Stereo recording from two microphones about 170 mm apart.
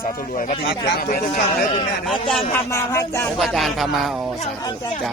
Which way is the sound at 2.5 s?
20° left (ahead or behind).